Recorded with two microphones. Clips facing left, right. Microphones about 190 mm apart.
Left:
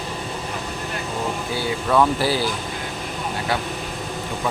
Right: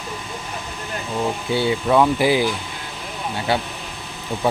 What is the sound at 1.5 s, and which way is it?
Speech, 25° right (ahead or behind).